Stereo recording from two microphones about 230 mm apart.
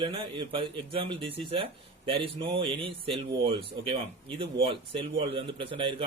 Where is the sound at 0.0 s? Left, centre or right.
Right.